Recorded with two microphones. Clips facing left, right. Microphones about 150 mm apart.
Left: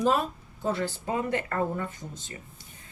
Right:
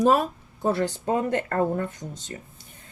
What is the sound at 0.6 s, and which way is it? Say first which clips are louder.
Speech: right 5 dB; 60° right (ahead or behind).